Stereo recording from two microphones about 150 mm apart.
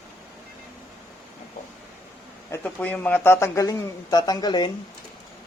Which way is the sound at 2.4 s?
20° left (ahead or behind).